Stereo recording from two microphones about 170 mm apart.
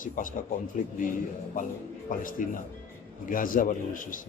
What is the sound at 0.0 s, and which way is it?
Speech, 50° left (ahead or behind).